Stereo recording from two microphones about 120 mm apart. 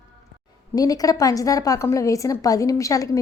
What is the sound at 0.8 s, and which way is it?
A woman's voice, 30° left (ahead or behind).